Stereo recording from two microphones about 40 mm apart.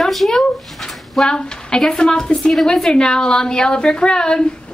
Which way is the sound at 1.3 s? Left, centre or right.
Centre.